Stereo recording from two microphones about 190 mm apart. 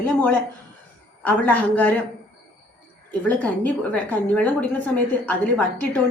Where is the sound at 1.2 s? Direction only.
10° left (ahead or behind).